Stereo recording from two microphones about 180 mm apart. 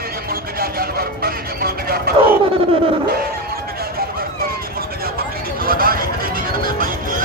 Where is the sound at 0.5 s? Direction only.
55° right (ahead or behind).